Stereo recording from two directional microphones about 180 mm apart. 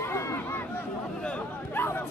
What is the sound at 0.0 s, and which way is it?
Chatter, 15° left (ahead or behind).